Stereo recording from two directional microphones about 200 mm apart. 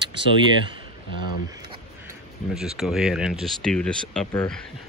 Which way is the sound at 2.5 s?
Centre (ahead or behind).